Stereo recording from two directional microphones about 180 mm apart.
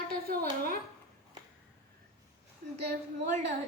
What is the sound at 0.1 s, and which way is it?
Speech, 55° right (ahead or behind).